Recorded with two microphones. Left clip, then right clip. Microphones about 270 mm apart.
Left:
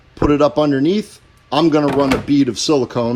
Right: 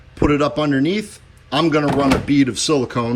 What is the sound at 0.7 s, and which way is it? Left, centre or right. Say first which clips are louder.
Speech: left 3 dB; centre.